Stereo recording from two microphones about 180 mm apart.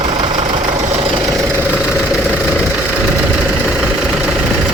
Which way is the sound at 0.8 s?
35° right (ahead or behind).